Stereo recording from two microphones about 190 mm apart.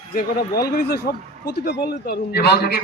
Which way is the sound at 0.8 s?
55° left (ahead or behind).